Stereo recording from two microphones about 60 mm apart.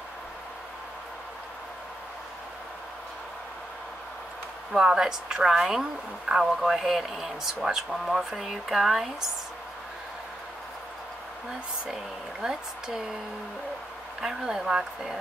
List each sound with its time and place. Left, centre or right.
4.7 s a woman's voice: centre
11.9 s speech: centre
14.2 s speech: centre